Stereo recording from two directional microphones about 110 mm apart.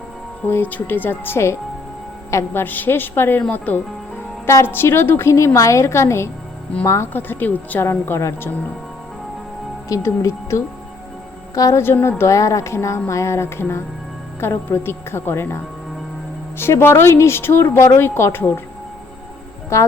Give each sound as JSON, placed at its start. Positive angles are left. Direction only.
{"t": 0.4, "sound": "a woman's voice", "side_deg": 15}
{"t": 4.4, "sound": "a woman's voice", "side_deg": 25}
{"t": 9.9, "sound": "a woman's voice", "side_deg": 25}
{"t": 16.6, "sound": "a woman's voice", "side_deg": 20}
{"t": 19.7, "sound": "a woman's voice", "side_deg": 25}